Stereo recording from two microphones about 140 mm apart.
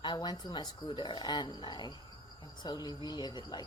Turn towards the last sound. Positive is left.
turn(degrees=30)  # may be behind; listen again after turning